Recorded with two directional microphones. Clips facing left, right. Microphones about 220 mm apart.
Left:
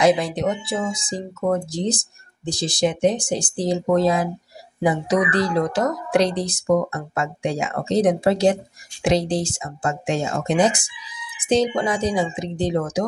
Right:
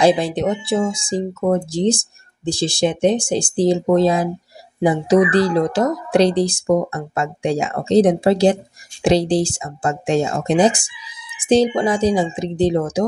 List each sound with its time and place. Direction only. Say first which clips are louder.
0.0 s speech: right 3 dB; 30° right (ahead or behind)